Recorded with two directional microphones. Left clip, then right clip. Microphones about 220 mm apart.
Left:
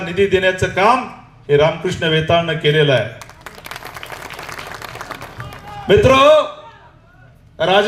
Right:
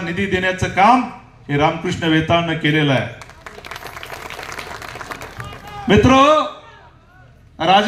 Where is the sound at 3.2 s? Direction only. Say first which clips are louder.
Left 1 dB; 45° left (ahead or behind).